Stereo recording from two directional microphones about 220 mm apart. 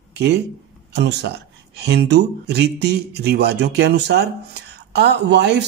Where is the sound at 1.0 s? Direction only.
50° right (ahead or behind).